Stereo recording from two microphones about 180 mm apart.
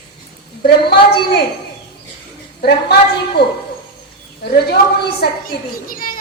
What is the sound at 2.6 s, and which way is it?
Speech, 60° left (ahead or behind).